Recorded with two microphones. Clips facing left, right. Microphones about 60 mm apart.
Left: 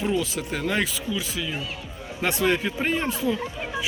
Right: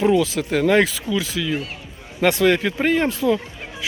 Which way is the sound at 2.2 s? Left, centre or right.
Right.